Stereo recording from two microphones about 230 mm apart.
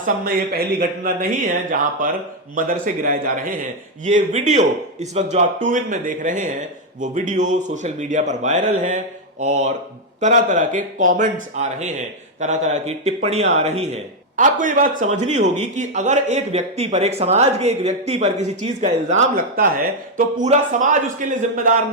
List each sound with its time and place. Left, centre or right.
0.5 s speech: right